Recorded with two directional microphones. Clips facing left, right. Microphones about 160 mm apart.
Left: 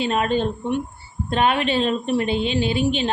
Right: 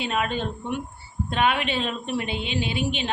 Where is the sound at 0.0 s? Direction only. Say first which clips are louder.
Left 6 dB; 35° left (ahead or behind).